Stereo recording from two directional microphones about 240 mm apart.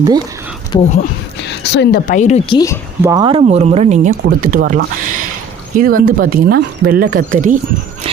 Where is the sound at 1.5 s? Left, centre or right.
Left.